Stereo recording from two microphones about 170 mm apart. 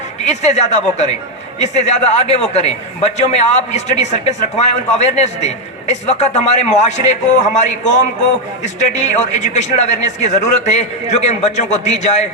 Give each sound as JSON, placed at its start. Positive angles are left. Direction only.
{"t": 0.3, "sound": "a man's voice", "side_deg": 40}